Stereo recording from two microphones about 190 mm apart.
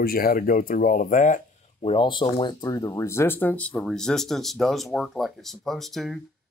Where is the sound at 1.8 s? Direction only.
25° left (ahead or behind).